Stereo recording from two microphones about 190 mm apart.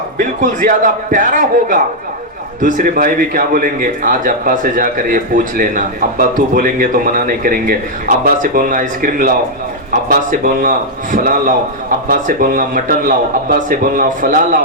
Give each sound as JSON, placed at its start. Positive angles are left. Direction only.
{"t": 0.2, "sound": "a man's voice", "side_deg": -45}